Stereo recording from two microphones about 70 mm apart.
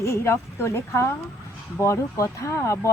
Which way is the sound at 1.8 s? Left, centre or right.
Left.